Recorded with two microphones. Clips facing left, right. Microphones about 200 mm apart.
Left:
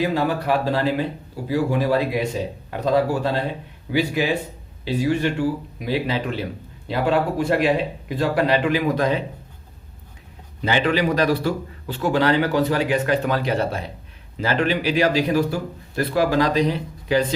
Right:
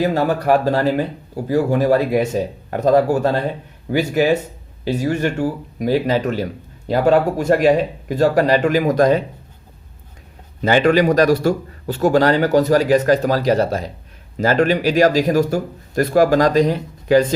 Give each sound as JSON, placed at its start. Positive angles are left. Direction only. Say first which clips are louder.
{"t": 0.0, "sound": "speech", "louder": "right 4 dB", "side_deg": -45}
{"t": 10.6, "sound": "speech", "louder": "right 6 dB", "side_deg": -45}